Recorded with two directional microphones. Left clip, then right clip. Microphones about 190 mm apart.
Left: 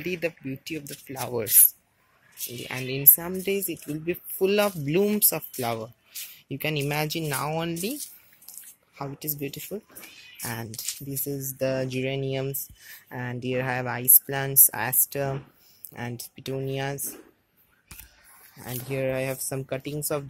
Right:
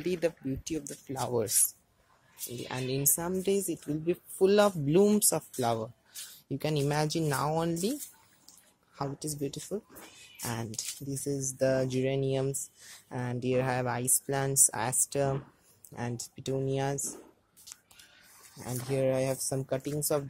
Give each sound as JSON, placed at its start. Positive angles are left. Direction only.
{"t": 0.0, "sound": "speech", "side_deg": -5}
{"t": 2.7, "sound": "speech", "side_deg": 0}
{"t": 18.6, "sound": "speech", "side_deg": 0}